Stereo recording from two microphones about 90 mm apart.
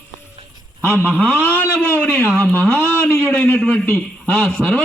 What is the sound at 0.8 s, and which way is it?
A man's voice, 25° left (ahead or behind).